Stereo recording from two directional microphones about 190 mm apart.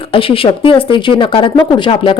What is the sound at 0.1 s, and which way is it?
Speech, 30° left (ahead or behind).